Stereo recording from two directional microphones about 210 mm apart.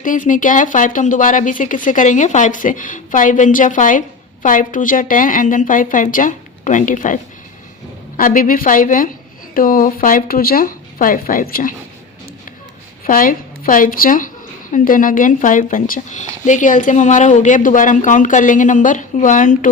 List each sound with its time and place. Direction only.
0.0 s speech: 40° left (ahead or behind)
13.1 s a woman's voice: 40° left (ahead or behind)